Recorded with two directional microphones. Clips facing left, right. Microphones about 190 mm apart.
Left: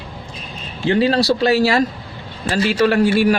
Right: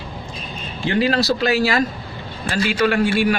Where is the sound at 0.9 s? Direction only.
30° left (ahead or behind).